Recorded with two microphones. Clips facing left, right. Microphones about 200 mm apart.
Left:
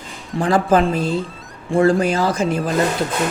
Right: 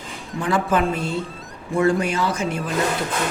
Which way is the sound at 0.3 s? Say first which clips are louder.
Left 5 dB; 35° left (ahead or behind).